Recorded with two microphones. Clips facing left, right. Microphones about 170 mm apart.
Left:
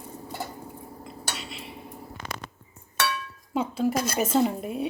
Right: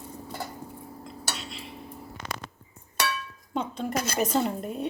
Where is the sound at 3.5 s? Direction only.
5° left (ahead or behind).